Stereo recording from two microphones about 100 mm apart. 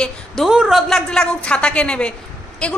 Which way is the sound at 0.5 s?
5° right (ahead or behind).